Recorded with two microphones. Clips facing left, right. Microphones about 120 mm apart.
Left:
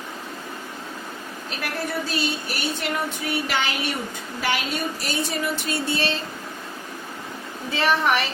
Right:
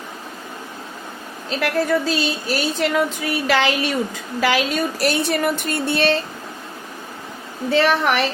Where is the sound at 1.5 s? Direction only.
90° right; by 6.1 s 60° right (ahead or behind).